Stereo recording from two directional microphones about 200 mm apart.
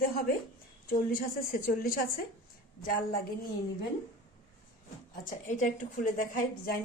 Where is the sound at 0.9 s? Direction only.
45° left (ahead or behind).